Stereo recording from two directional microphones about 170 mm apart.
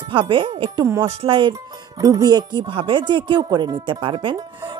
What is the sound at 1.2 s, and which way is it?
Speech, 30° right (ahead or behind).